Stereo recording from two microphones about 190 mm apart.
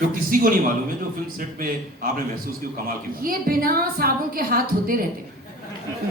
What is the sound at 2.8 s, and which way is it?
A woman's voice, 50° right (ahead or behind).